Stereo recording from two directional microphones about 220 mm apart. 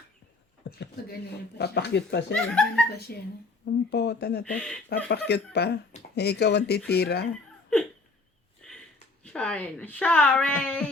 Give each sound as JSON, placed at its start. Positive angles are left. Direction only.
{"t": 0.7, "sound": "speech", "side_deg": 55}
{"t": 2.3, "sound": "speech", "side_deg": 5}
{"t": 2.9, "sound": "speech", "side_deg": 45}
{"t": 4.4, "sound": "speech", "side_deg": 5}
{"t": 5.0, "sound": "speech", "side_deg": 50}
{"t": 9.2, "sound": "speech", "side_deg": 5}